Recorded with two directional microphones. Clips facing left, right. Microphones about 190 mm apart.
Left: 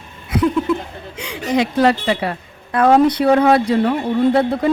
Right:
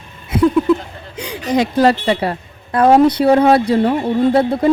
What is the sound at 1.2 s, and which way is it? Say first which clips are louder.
A woman's voice: right 2 dB; 40° right (ahead or behind).